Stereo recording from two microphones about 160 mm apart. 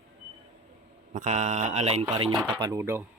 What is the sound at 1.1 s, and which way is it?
Speech, 50° right (ahead or behind).